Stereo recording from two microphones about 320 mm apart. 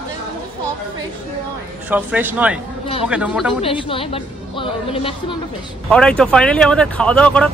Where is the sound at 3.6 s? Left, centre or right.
Centre.